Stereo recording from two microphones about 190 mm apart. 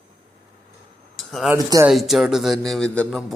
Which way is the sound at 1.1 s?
Centre (ahead or behind).